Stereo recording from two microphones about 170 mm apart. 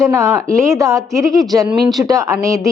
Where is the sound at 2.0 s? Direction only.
20° right (ahead or behind).